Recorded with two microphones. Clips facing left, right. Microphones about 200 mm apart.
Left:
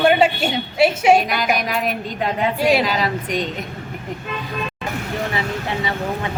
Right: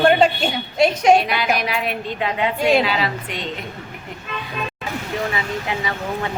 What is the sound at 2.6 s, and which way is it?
Speech, 5° left (ahead or behind).